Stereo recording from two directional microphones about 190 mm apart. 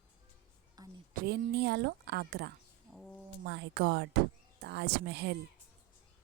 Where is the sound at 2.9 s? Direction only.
Centre (ahead or behind).